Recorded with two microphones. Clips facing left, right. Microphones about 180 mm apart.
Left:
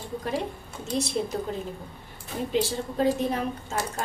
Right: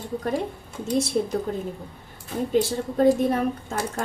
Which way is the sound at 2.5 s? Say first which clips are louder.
Right 4 dB; 50° right (ahead or behind).